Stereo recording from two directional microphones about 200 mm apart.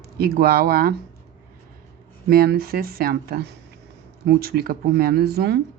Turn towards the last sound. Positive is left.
turn(degrees=-50)  # may be behind; listen again after turning